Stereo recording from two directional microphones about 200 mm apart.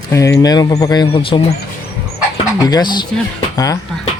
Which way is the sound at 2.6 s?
20° left (ahead or behind).